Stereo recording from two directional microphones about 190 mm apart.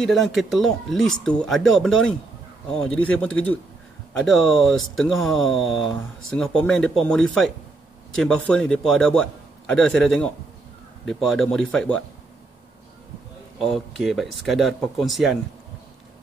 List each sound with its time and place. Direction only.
0.0 s a man's voice: centre (ahead or behind)
13.6 s a man's voice: centre (ahead or behind)